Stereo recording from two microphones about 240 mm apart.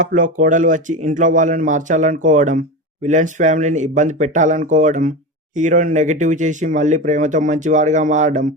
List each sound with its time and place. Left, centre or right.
0.0 s speech: right